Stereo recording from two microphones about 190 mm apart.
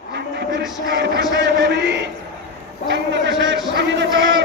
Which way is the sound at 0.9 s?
65° right (ahead or behind).